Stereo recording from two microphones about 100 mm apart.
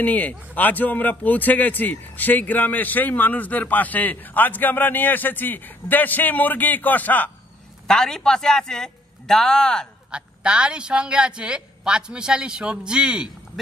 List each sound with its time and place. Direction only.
0.0 s a man's voice: 15° left (ahead or behind)
7.8 s a man's voice: 5° left (ahead or behind)
10.1 s a woman's voice: 10° right (ahead or behind)